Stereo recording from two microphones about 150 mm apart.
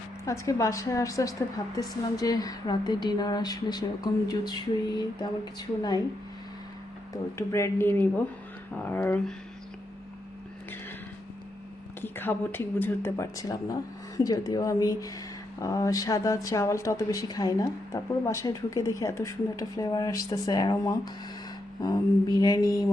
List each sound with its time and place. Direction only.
0.3 s speech: 20° left (ahead or behind)
7.1 s speech: 20° left (ahead or behind)
12.0 s speech: 15° left (ahead or behind)